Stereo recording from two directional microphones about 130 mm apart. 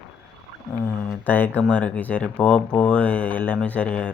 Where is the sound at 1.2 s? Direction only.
15° left (ahead or behind).